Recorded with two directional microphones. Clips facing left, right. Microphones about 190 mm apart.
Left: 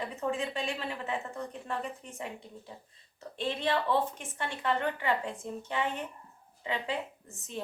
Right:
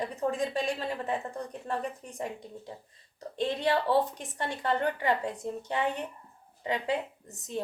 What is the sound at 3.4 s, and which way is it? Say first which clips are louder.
A woman's voice: right 3 dB; 40° right (ahead or behind).